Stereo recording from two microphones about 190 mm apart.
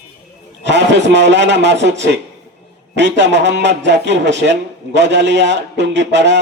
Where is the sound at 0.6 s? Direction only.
65° right (ahead or behind).